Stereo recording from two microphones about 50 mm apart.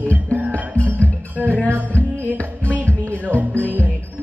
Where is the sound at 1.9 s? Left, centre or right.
Left.